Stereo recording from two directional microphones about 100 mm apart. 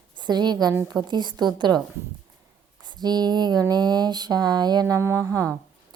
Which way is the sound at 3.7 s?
45° right (ahead or behind).